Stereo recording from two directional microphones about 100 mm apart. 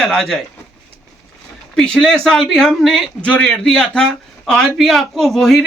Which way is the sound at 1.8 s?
5° left (ahead or behind).